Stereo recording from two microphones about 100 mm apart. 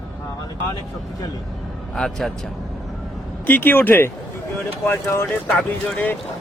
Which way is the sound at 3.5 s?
20° left (ahead or behind).